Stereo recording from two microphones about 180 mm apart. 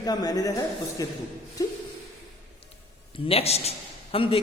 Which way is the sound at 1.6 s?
20° left (ahead or behind).